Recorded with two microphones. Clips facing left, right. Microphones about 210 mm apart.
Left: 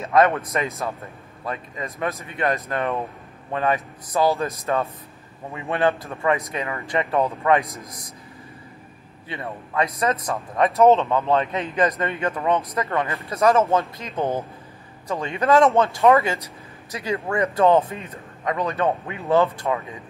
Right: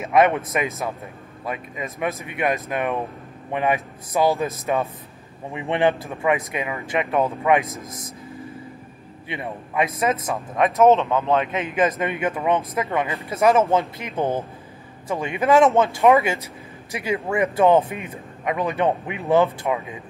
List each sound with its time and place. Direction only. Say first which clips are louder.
0.2 s speech: right 1 dB; 10° right (ahead or behind)
9.3 s speech: right 1 dB; 15° right (ahead or behind)
16.0 s speech: even; 15° right (ahead or behind)